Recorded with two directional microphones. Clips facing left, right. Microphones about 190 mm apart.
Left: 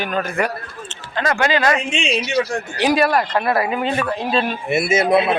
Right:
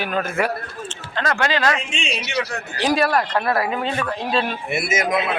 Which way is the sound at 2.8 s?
Centre (ahead or behind).